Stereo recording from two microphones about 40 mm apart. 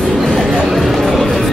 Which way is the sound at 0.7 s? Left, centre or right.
Centre.